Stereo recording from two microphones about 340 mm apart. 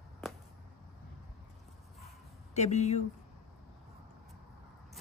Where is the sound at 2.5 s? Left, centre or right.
Centre.